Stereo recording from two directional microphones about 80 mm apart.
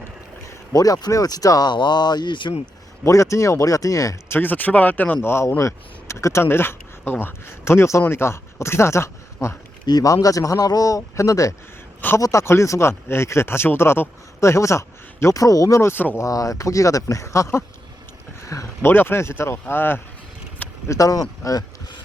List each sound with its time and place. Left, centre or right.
0.4 s speech: left
3.0 s speech: left
4.3 s speech: left
9.8 s speech: left
16.1 s speech: left
18.9 s speech: left
20.8 s speech: left